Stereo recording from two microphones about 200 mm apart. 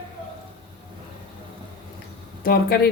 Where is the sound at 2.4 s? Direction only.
50° left (ahead or behind).